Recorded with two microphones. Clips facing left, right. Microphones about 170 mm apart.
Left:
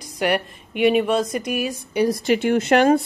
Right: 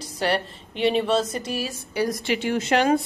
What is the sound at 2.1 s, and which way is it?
Speech, 45° left (ahead or behind).